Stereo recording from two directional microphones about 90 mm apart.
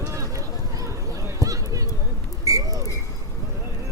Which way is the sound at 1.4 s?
40° right (ahead or behind).